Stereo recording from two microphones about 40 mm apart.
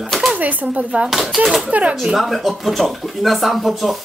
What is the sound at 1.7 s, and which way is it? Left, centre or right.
Speech, right.